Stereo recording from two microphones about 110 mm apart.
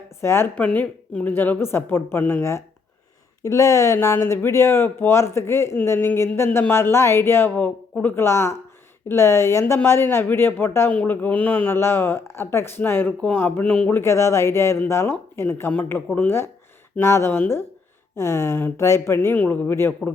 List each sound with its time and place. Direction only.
0.2 s speech: 25° left (ahead or behind)
13.9 s speech: 25° left (ahead or behind)